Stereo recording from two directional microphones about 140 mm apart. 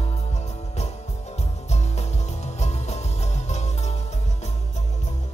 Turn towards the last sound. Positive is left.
turn(degrees=55)  # may be behind; listen again after turning